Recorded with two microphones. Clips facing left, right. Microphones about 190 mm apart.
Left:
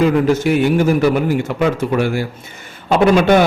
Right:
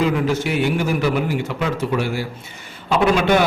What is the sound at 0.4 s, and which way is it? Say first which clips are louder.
A man's voice: left 6 dB; 45° left (ahead or behind).